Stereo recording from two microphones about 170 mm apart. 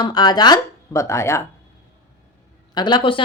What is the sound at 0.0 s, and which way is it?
Speech, 25° left (ahead or behind).